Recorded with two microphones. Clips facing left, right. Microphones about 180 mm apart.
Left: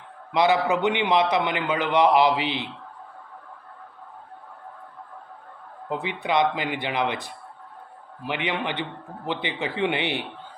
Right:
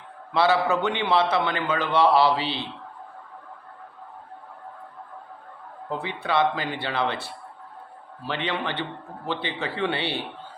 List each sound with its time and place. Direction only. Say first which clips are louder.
0.3 s a man's voice: left 1 dB; 15° left (ahead or behind)
5.9 s a man's voice: left 1 dB; 15° left (ahead or behind)